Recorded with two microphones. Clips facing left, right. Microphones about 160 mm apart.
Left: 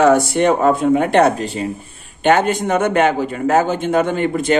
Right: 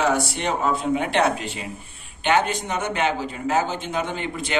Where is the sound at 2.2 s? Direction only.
50° left (ahead or behind).